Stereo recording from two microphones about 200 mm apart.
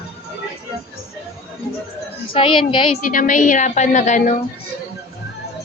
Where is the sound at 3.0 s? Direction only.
40° left (ahead or behind).